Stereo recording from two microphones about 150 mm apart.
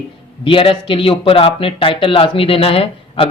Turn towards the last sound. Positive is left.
turn(degrees=40)  # may be behind; listen again after turning